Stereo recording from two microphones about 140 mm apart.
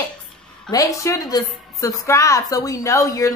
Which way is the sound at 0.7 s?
25° left (ahead or behind).